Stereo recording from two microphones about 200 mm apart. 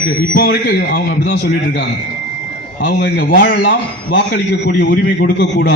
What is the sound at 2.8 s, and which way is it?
Speech, 50° left (ahead or behind).